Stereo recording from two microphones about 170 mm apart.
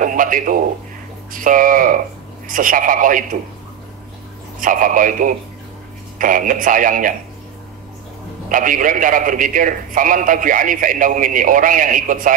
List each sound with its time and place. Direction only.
0.0 s a man's voice: 50° right (ahead or behind)
4.6 s a man's voice: 55° right (ahead or behind)
8.5 s a man's voice: 50° right (ahead or behind)